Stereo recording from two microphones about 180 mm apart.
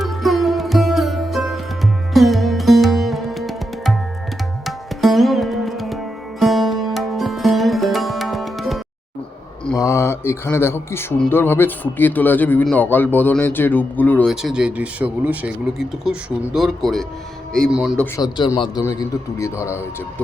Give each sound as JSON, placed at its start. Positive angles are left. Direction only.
{"t": 0.0, "sound": "sitar", "side_deg": 0}
{"t": 9.8, "sound": "speech", "side_deg": 15}
{"t": 18.2, "sound": "a man's voice", "side_deg": 25}